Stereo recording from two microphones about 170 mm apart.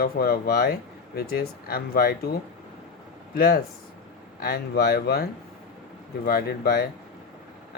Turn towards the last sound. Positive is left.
turn(degrees=65)  # may be behind; listen again after turning